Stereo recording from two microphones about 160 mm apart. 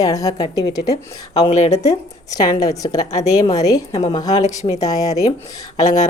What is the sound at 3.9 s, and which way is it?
Speech, 40° left (ahead or behind).